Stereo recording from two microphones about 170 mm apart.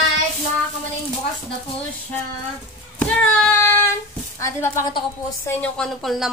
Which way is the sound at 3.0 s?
5° left (ahead or behind).